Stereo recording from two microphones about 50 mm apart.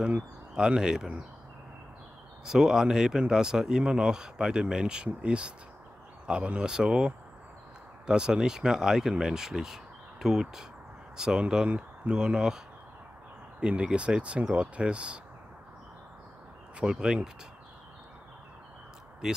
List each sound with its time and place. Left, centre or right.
0.6 s speech: centre
2.4 s speech: centre
13.6 s speech: right
16.8 s speech: centre